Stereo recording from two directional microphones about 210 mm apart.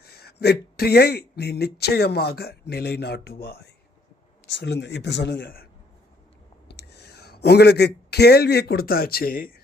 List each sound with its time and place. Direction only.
0.0 s speech: 50° left (ahead or behind)
6.7 s speech: 50° left (ahead or behind)